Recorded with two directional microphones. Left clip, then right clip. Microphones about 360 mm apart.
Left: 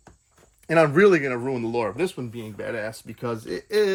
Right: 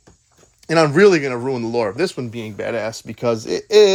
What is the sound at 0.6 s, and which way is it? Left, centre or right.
Speech, centre.